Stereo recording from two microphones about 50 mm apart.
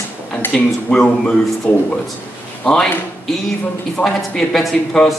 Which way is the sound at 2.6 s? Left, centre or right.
Centre.